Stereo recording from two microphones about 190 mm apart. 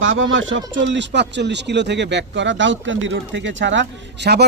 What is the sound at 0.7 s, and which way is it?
Speech, 70° right (ahead or behind).